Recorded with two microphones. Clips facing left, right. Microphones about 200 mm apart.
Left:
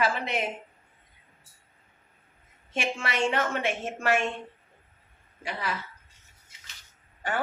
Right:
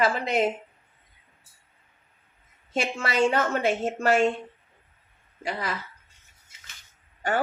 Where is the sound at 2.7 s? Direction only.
40° right (ahead or behind).